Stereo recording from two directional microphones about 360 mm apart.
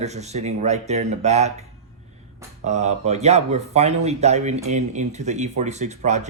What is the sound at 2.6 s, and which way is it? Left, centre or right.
Speech, centre.